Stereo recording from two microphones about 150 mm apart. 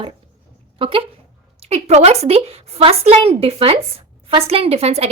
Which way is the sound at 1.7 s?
45° right (ahead or behind).